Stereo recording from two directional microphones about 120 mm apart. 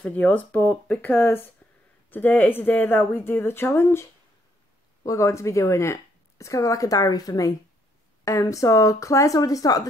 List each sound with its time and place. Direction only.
0.0 s speech: 15° left (ahead or behind)
5.0 s speech: 25° left (ahead or behind)